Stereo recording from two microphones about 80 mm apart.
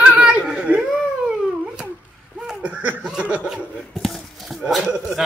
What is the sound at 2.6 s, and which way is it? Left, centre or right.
Laughter, centre.